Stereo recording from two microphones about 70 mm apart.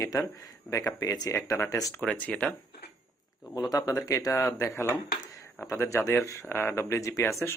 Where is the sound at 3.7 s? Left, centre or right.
Left.